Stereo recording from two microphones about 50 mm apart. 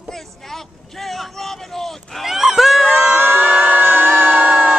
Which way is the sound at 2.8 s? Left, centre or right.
Right.